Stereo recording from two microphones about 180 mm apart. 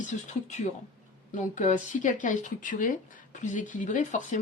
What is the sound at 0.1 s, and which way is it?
Speech, 40° left (ahead or behind).